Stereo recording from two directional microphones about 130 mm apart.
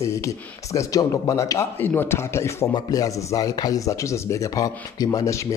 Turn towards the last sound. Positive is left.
turn(degrees=30)  # may be behind; listen again after turning